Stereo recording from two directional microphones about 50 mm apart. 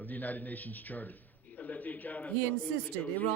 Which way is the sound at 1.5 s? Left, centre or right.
Left.